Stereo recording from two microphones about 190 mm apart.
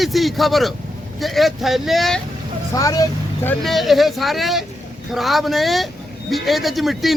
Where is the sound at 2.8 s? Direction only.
20° left (ahead or behind).